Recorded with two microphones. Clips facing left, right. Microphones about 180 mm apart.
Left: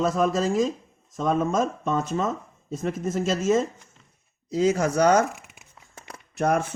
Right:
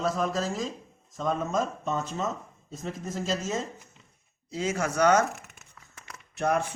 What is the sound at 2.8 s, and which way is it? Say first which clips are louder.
Speech: left 7 dB; 80° left.